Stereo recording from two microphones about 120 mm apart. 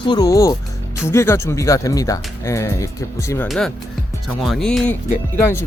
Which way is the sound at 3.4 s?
5° left (ahead or behind).